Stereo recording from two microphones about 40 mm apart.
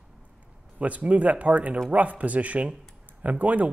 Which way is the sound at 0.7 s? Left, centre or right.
Right.